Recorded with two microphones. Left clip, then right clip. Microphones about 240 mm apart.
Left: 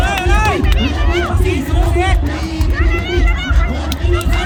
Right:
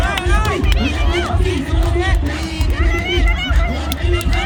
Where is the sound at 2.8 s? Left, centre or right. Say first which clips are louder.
Even; right.